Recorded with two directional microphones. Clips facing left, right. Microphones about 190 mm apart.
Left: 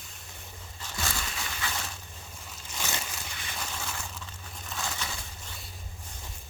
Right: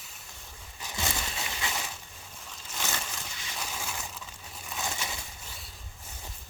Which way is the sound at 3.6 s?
5° right (ahead or behind).